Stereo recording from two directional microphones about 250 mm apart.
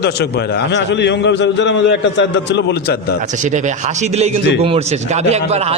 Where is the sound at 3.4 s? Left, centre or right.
Right.